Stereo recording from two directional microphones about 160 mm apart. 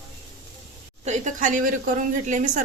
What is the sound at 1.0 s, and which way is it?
A woman's voice, 50° right (ahead or behind).